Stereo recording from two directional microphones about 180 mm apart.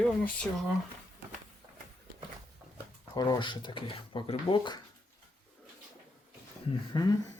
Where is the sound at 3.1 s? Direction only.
25° left (ahead or behind).